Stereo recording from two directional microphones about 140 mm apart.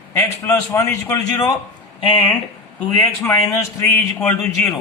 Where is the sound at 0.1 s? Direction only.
20° left (ahead or behind).